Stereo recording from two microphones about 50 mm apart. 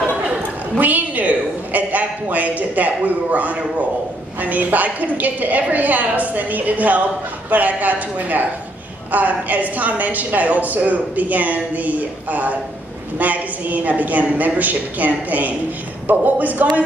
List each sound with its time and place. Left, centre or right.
0.7 s a woman's voice: right